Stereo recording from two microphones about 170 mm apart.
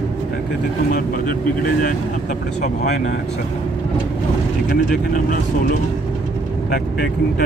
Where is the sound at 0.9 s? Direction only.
55° left (ahead or behind).